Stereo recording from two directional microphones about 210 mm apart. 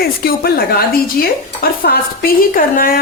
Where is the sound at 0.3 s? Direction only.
45° left (ahead or behind).